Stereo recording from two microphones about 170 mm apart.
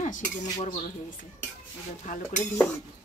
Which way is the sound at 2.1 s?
45° left (ahead or behind).